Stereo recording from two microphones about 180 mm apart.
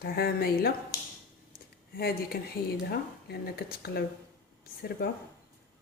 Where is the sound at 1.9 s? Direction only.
55° left (ahead or behind).